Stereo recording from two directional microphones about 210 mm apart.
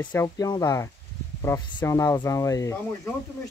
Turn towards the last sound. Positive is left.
turn(degrees=15)  # may be behind; listen again after turning